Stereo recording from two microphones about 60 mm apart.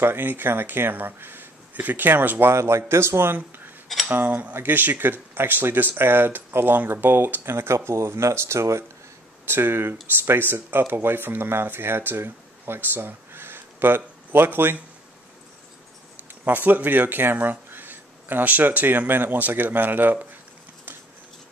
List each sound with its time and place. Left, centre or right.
0.0 s speech: right
2.5 s speech: right
7.4 s speech: right
9.5 s speech: right
16.4 s speech: right